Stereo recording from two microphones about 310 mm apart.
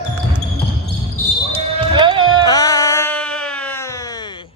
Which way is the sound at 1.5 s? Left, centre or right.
Centre.